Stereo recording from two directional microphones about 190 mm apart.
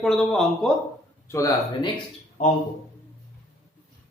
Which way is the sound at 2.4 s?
40° left (ahead or behind).